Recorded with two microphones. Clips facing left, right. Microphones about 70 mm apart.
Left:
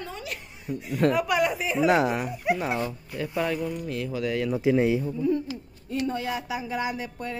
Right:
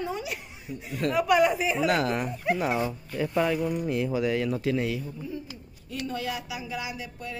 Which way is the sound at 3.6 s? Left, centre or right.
Centre.